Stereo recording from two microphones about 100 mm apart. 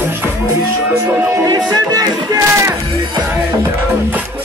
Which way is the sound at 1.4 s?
40° right (ahead or behind).